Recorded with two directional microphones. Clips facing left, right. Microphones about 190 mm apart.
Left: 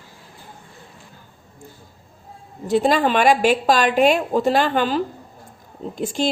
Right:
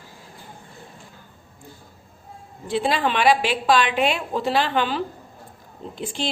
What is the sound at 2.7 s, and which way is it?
Speech, 45° left (ahead or behind).